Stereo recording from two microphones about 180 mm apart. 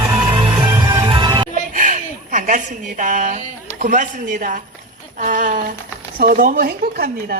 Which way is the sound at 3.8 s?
45° right (ahead or behind).